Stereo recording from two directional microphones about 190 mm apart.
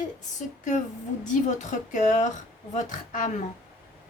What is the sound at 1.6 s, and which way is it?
Speech, 40° left (ahead or behind).